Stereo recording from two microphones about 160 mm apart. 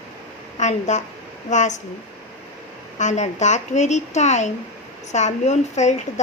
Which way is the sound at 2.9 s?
45° left (ahead or behind).